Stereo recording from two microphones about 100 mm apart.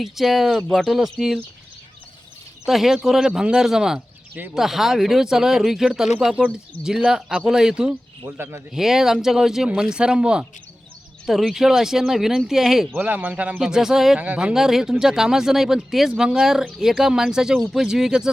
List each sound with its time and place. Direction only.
0.0 s speech: centre (ahead or behind)
2.6 s speech: 5° right (ahead or behind)
8.4 s speech: 25° right (ahead or behind)
8.7 s a man's voice: 5° right (ahead or behind)
13.0 s a man's voice: 15° right (ahead or behind)